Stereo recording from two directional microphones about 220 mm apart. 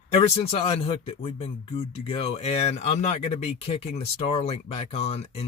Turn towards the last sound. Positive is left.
turn(degrees=25)  # may be behind; listen again after turning